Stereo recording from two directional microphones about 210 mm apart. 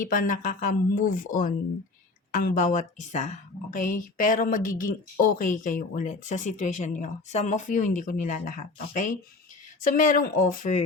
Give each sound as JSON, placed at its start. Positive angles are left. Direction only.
{"t": 0.0, "sound": "a woman's voice", "side_deg": 40}